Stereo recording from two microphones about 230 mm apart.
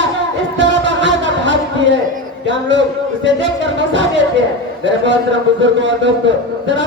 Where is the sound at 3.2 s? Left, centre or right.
Right.